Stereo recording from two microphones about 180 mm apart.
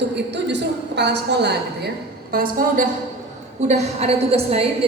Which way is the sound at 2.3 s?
50° right (ahead or behind).